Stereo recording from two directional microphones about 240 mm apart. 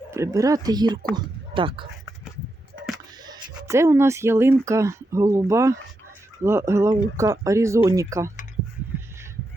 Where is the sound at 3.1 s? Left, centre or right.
Centre.